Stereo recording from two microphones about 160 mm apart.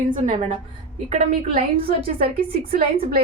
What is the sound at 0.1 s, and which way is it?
A woman's voice, 45° right (ahead or behind).